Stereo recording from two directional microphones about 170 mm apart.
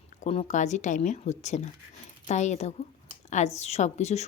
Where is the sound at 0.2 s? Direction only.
40° left (ahead or behind).